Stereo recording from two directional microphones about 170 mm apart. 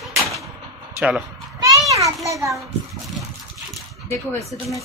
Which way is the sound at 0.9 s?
5° right (ahead or behind).